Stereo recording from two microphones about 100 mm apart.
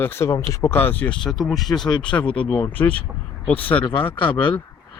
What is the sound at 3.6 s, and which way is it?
Speech, 60° left (ahead or behind).